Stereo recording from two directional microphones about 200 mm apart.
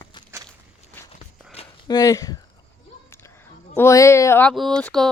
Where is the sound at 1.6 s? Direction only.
20° left (ahead or behind).